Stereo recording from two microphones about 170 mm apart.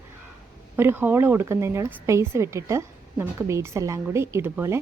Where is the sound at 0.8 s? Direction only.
10° right (ahead or behind).